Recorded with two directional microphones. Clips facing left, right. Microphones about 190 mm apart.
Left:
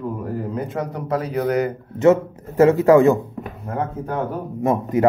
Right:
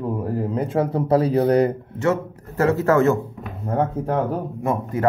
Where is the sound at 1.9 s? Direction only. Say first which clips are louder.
Left 6 dB; 20° left (ahead or behind).